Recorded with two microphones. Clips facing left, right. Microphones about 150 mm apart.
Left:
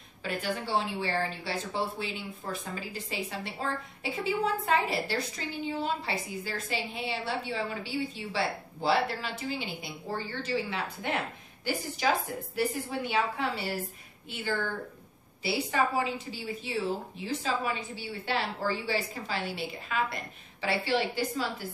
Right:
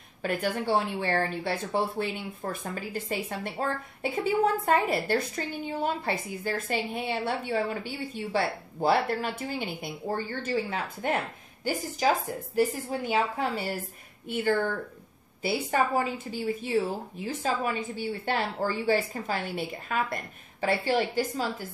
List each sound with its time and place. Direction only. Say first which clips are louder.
0.2 s speech: right 4 dB; 50° right (ahead or behind)
12.5 s speech: right 4 dB; 40° right (ahead or behind)